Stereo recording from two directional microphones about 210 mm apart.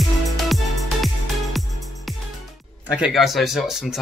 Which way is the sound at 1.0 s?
Centre (ahead or behind).